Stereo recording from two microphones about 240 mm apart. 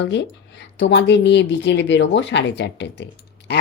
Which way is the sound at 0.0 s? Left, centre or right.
Left.